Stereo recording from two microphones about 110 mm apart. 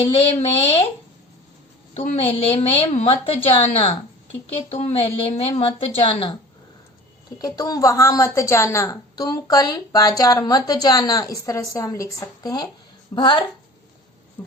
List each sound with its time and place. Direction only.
0.0 s speech: 65° left (ahead or behind)
1.9 s a sound: 80° left
2.4 s a woman's voice: 65° left (ahead or behind)
7.3 s a woman's voice: 35° left (ahead or behind)
13.1 s speech: 45° left (ahead or behind)
14.4 s hum: 15° left (ahead or behind)